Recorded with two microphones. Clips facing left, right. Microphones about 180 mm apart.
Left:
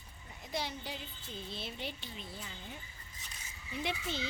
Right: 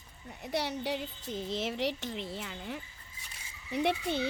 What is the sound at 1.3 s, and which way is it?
Speech, 90° right.